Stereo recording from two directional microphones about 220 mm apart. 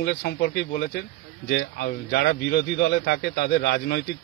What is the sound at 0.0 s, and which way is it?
A man's voice, 45° left (ahead or behind).